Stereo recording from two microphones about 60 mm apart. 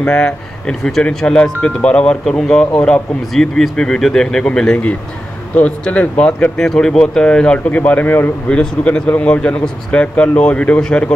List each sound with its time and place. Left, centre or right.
0.0 s speech: centre
5.6 s speech: left
8.5 s speech: centre